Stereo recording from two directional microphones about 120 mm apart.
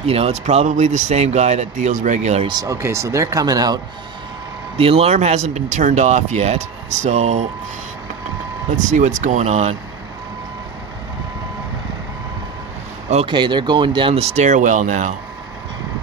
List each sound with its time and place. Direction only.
0.0 s speech: 55° right (ahead or behind); by 2.4 s 75° right (ahead or behind)
2.4 s speech: 35° right (ahead or behind)
4.7 s speech: 55° right (ahead or behind); by 7.4 s 70° right (ahead or behind)
8.6 s speech: 90° right; by 9.8 s 65° right (ahead or behind)
13.3 s speech: 40° right (ahead or behind); by 15.1 s 90° right